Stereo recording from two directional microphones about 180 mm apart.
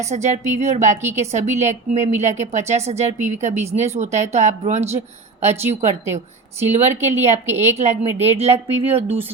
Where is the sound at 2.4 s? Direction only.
40° right (ahead or behind).